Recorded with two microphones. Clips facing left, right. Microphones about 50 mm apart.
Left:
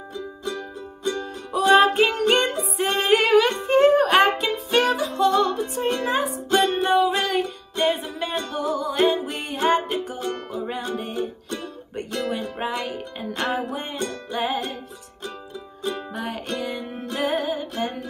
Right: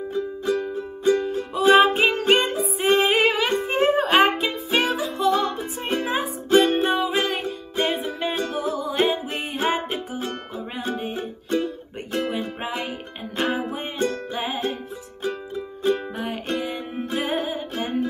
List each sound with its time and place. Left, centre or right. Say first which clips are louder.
0.1 s music: right 6 dB; right
6.9 s music: left 4 dB; centre
7.2 s music: even; right
7.9 s music: right 1 dB; centre
10.1 s music: left 1 dB; right
12.3 s music: left 1 dB; centre
15.8 s music: right 5 dB; centre